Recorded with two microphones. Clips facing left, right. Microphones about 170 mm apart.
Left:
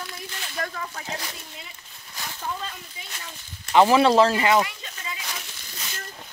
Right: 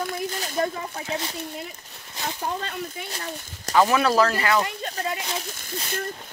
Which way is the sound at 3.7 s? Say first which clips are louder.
Left 3 dB; 25° left (ahead or behind).